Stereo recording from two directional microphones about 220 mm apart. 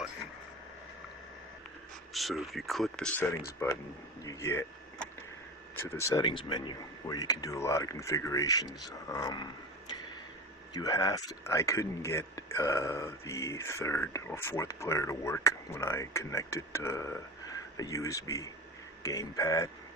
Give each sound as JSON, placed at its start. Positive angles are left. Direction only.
{"t": 2.1, "sound": "speech", "side_deg": 0}
{"t": 10.8, "sound": "speech", "side_deg": 15}